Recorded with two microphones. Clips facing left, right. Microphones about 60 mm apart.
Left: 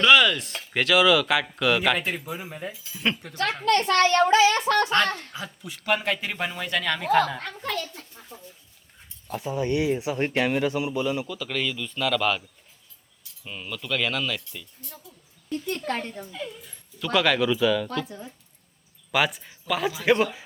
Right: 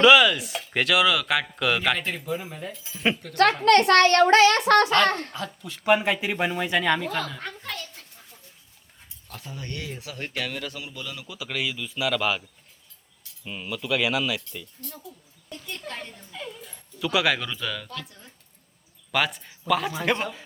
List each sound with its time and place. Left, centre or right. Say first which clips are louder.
0.0 s a woman's voice: right 2 dB; centre
3.6 s a child's voice: right 2 dB; right
5.0 s a child's voice: right 5 dB; right
5.8 s speech: right 4 dB; centre
9.2 s speech: left 12 dB; centre
11.3 s speech: left 2 dB; centre
13.4 s speech: right 3 dB; centre
15.6 s speech: left 7 dB; left
16.3 s speech: left 2 dB; centre
18.0 s speech: left 9 dB; left
19.1 s speech: left 2 dB; centre